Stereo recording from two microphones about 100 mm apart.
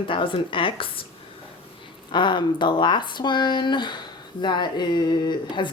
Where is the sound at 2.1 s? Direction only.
50° left (ahead or behind).